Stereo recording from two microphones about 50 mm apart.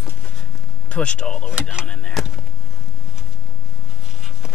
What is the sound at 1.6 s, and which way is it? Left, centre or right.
Speech, centre.